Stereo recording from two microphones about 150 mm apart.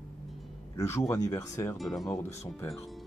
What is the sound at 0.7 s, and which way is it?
Speech, 20° left (ahead or behind).